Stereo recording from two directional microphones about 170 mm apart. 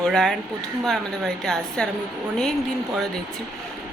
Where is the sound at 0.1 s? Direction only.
5° left (ahead or behind).